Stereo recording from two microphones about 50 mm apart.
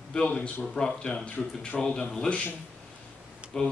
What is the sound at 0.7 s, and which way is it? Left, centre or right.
Speech, centre.